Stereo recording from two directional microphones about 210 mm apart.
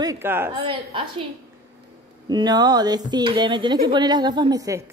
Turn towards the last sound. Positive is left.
turn(degrees=-15)  # may be behind; listen again after turning